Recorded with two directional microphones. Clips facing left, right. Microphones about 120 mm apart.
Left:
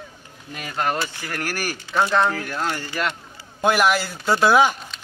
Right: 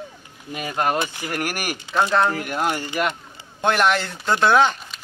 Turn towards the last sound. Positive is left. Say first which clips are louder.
# left 1 dB
turn(degrees=5)  # may be behind; listen again after turning